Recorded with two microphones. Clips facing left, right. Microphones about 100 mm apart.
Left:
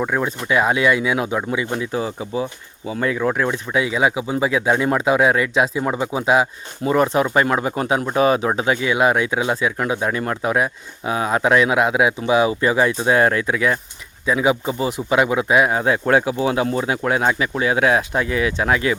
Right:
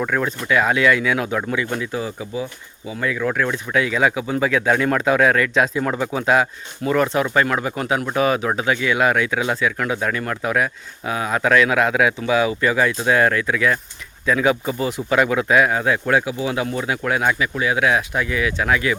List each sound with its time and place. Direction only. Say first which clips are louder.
0.0 s speech: even; 15° left (ahead or behind)
6.8 s speech: left 2 dB; 25° left (ahead or behind)